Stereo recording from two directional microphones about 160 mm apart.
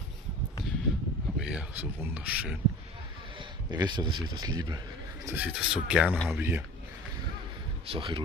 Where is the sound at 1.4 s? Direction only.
5° right (ahead or behind).